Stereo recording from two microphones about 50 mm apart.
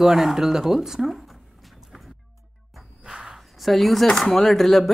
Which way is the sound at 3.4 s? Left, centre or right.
Centre.